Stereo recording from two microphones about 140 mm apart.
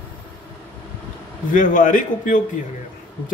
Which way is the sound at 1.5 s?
70° left (ahead or behind).